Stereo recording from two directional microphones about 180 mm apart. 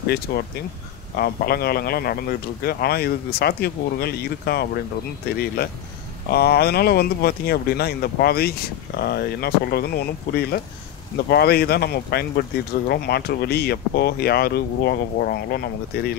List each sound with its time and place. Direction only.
1.1 s speech: 60° left (ahead or behind)
6.3 s speech: 60° left (ahead or behind)